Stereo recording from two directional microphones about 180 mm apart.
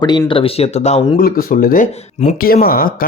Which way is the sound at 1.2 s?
50° left (ahead or behind).